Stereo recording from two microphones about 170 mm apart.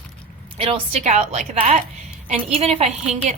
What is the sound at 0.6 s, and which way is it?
Speech, 35° right (ahead or behind).